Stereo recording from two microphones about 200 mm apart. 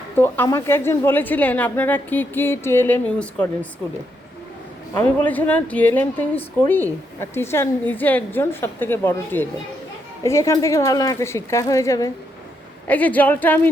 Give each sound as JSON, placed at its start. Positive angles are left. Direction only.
{"t": 0.2, "sound": "speech", "side_deg": 10}
{"t": 4.9, "sound": "speech", "side_deg": 10}